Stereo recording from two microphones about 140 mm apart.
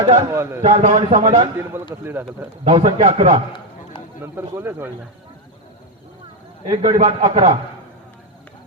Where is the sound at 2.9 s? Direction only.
45° right (ahead or behind).